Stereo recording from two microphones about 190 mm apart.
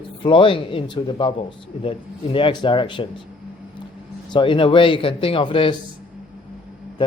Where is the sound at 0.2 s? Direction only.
25° left (ahead or behind).